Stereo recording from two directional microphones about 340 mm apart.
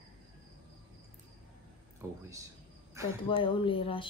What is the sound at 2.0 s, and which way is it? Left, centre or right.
Speech, centre.